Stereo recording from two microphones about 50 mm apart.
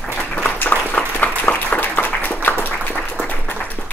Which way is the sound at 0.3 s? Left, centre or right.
Left.